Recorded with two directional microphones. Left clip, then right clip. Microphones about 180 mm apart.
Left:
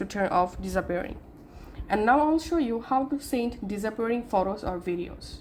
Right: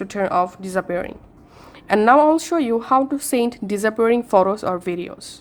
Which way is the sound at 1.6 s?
30° right (ahead or behind).